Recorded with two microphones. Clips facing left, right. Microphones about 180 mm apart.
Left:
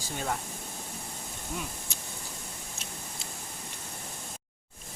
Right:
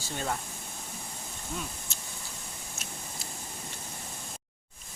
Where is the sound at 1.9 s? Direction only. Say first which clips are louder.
Left 2 dB; 15° left (ahead or behind).